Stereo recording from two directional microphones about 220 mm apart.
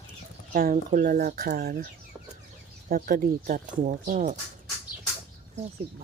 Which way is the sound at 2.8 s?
40° right (ahead or behind).